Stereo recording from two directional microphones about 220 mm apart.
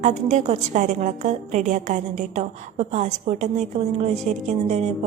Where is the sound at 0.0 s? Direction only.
30° right (ahead or behind).